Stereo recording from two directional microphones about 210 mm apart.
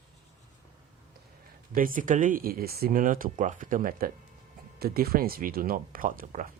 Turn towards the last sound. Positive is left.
turn(degrees=-40)  # may be behind; listen again after turning